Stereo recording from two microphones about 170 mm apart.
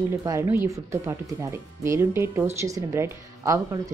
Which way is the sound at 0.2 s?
15° right (ahead or behind).